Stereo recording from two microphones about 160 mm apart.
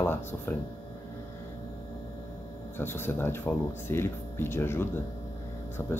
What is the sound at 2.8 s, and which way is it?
Speech, 15° left (ahead or behind).